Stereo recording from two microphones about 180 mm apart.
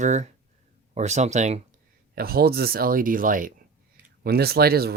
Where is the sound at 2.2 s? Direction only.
55° right (ahead or behind).